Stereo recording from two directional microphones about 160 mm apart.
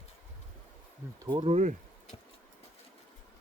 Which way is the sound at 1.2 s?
30° right (ahead or behind).